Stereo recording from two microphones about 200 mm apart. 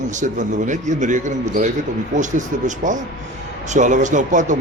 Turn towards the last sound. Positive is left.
turn(degrees=-40)  # may be behind; listen again after turning